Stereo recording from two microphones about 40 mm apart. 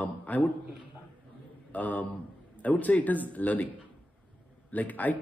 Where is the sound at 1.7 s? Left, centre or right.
Left.